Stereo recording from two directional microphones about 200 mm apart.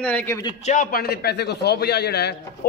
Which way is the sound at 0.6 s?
45° left (ahead or behind).